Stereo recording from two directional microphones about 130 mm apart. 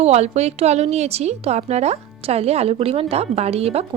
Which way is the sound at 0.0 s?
55° right (ahead or behind).